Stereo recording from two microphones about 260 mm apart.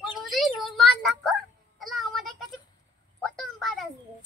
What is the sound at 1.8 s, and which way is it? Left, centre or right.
Music, centre.